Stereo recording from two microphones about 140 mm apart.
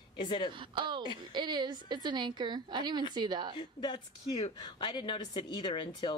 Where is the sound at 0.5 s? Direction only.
35° right (ahead or behind).